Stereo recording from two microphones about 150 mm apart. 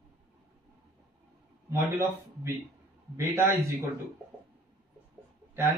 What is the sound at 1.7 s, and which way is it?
Speech, 20° right (ahead or behind).